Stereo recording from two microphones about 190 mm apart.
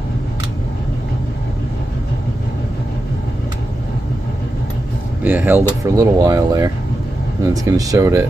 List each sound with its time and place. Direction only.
5.2 s speech: 10° right (ahead or behind)